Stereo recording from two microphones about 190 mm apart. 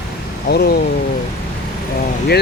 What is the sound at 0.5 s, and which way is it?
Speech, 55° left (ahead or behind).